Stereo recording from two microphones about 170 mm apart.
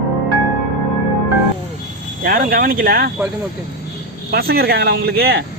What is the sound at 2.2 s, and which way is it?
Speech, 55° right (ahead or behind).